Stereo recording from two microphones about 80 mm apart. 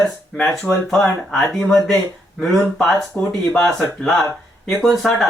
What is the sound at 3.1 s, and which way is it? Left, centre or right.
Speech, left.